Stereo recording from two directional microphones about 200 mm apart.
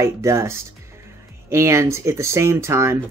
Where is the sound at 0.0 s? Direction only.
15° right (ahead or behind).